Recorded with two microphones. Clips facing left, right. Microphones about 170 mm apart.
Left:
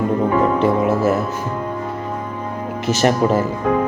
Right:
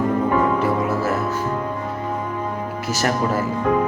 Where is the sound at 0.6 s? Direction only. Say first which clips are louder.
Left 5 dB; 20° left (ahead or behind).